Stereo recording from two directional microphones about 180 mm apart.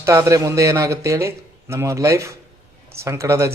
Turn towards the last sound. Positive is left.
turn(degrees=-15)  # may be behind; listen again after turning